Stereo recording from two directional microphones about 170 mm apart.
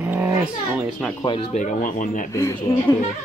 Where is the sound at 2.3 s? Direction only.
20° left (ahead or behind).